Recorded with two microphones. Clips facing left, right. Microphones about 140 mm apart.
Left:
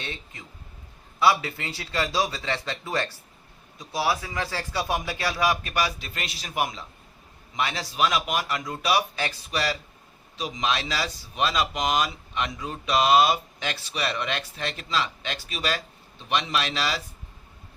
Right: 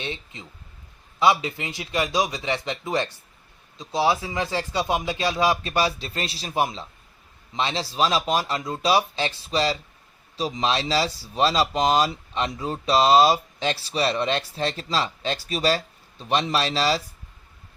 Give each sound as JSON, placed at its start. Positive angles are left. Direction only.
{"t": 0.0, "sound": "a man's voice", "side_deg": -20}